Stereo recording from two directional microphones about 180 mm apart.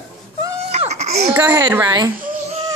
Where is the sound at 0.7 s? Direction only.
35° right (ahead or behind).